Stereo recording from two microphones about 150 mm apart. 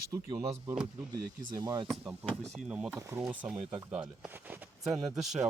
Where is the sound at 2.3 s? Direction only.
5° right (ahead or behind).